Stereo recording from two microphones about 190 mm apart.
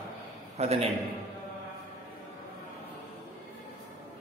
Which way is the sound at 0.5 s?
35° right (ahead or behind).